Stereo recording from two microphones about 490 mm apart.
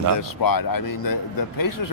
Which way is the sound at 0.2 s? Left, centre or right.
Left.